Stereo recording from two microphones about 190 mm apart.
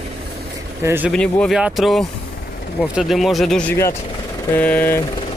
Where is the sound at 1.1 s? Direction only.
5° left (ahead or behind).